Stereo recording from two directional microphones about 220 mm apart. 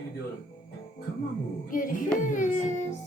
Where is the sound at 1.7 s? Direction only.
35° left (ahead or behind).